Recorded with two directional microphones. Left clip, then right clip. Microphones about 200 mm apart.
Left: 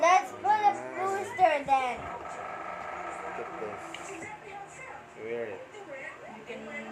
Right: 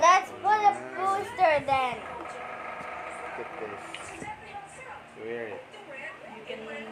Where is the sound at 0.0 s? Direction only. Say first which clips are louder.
Right 2 dB; 30° right (ahead or behind).